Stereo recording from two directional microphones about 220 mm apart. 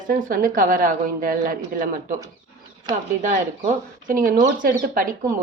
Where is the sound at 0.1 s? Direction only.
40° right (ahead or behind).